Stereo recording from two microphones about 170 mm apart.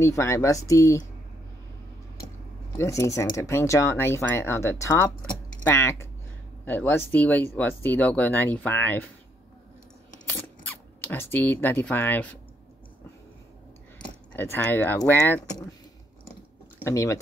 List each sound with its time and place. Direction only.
0.0 s speech: 15° left (ahead or behind)
2.8 s speech: 20° left (ahead or behind)
11.0 s speech: 10° left (ahead or behind)
14.3 s speech: 10° left (ahead or behind)
16.8 s speech: 15° left (ahead or behind)